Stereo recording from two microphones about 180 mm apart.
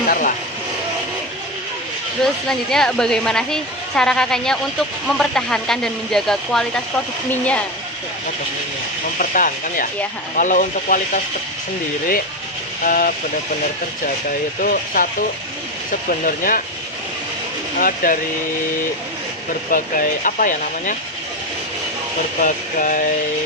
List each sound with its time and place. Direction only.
0.1 s speech: 45° left (ahead or behind)
2.2 s speech: 5° left (ahead or behind)
9.1 s speech: 50° left (ahead or behind)
12.8 s speech: 50° left (ahead or behind)
14.3 s speech: 50° left (ahead or behind)
17.7 s speech: 50° left (ahead or behind)
19.7 s speech: 50° left (ahead or behind)
22.4 s speech: 45° left (ahead or behind)